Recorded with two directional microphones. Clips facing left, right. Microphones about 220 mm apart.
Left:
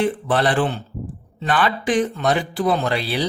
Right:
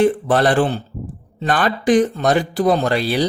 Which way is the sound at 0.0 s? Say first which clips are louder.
Right 5 dB; 45° right (ahead or behind).